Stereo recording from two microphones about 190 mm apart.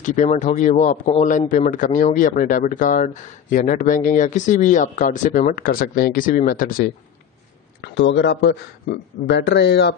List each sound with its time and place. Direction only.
0.0 s speech: 40° left (ahead or behind)
7.8 s speech: 70° left (ahead or behind)